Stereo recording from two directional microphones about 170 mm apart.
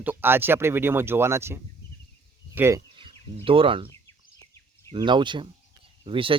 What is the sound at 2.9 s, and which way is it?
Speech, 30° right (ahead or behind).